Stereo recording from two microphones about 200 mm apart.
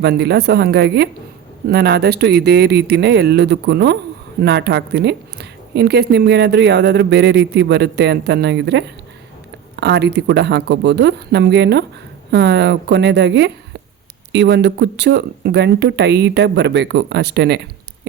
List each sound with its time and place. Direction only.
0.0 s a woman's voice: 55° right (ahead or behind)
9.8 s a woman's voice: 55° right (ahead or behind)